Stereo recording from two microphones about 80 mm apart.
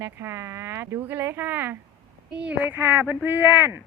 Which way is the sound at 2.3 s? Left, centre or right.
Centre.